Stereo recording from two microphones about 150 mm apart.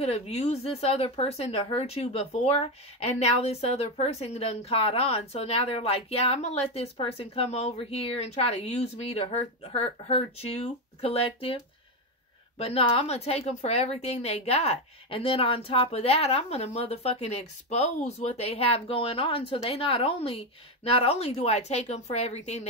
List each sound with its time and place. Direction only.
0.0 s a woman's voice: 45° left (ahead or behind)